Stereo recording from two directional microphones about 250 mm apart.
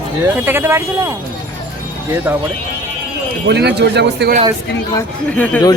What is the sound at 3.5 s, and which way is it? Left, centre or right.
Speech, right.